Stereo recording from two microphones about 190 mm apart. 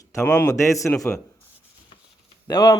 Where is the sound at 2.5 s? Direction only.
25° left (ahead or behind).